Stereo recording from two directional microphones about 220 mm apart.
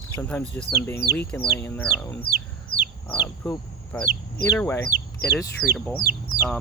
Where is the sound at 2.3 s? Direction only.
40° right (ahead or behind).